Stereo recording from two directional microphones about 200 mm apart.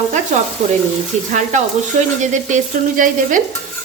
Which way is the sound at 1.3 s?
35° right (ahead or behind).